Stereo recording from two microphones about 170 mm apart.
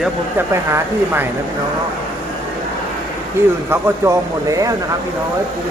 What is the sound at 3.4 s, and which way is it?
Speech, 15° right (ahead or behind).